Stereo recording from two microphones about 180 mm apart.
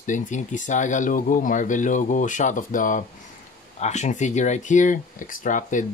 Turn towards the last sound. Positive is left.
turn(degrees=45)  # may be behind; listen again after turning